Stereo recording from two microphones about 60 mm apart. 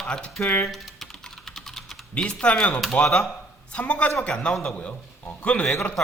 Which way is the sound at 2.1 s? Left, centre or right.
Centre.